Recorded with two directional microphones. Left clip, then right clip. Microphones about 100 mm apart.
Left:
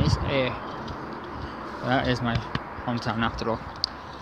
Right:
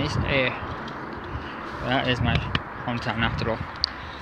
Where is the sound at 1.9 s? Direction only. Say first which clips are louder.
Right 1 dB; 55° left (ahead or behind).